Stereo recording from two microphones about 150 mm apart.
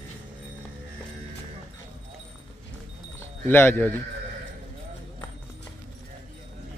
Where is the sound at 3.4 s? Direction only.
15° left (ahead or behind).